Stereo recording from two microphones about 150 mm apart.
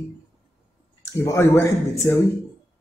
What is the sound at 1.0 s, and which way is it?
Speech, 15° left (ahead or behind).